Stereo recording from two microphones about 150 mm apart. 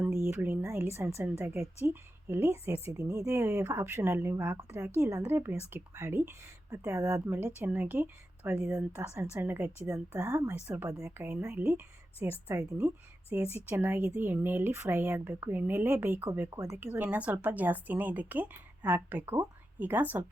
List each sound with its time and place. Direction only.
0.1 s speech: 15° right (ahead or behind)